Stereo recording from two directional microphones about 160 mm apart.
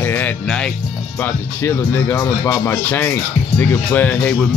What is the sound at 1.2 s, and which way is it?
Speech, 15° left (ahead or behind).